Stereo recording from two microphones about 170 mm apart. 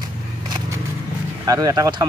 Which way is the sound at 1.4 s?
20° right (ahead or behind).